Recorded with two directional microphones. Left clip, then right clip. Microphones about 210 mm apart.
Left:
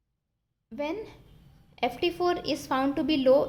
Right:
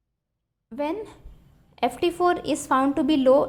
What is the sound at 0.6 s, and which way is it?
A woman's voice, 15° right (ahead or behind).